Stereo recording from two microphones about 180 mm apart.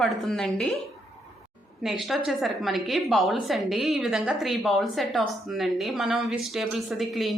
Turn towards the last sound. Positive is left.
turn(degrees=0)  # may be behind; listen again after turning